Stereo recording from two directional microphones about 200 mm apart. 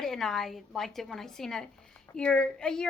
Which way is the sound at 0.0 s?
Centre (ahead or behind).